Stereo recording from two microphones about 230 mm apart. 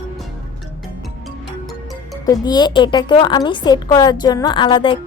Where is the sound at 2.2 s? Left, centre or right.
Centre.